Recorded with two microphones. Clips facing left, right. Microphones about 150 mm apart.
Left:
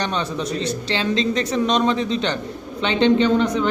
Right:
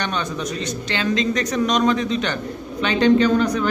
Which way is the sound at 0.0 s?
30° left (ahead or behind).